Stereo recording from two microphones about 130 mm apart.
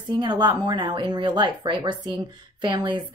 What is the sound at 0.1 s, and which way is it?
A woman's voice, 35° right (ahead or behind).